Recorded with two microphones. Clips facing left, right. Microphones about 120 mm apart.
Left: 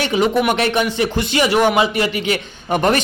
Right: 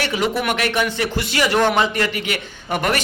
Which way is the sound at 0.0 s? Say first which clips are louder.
Left 5 dB; 20° left (ahead or behind).